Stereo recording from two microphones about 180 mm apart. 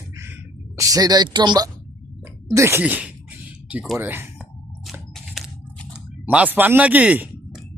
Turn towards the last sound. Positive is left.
turn(degrees=-10)  # may be behind; listen again after turning